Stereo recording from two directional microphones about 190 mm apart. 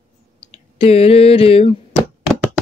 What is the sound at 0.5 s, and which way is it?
Clicking, 30° left (ahead or behind).